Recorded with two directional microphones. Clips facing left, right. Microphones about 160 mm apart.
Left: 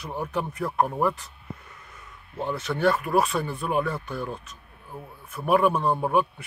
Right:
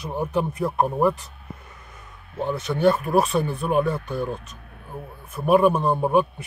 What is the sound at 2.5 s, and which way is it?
Speech, 15° right (ahead or behind).